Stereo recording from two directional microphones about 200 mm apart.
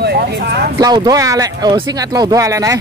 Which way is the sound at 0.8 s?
20° right (ahead or behind).